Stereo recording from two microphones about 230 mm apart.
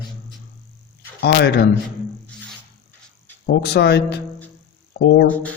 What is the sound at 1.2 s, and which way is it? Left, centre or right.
Speech, left.